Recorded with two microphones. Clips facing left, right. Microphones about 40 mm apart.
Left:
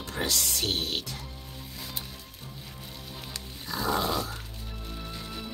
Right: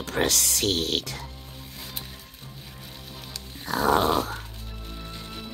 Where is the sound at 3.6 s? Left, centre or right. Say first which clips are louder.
Right 7 dB; right.